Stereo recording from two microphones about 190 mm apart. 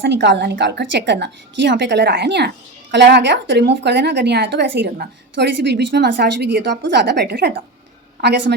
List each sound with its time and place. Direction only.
0.0 s a woman's voice: 70° right (ahead or behind)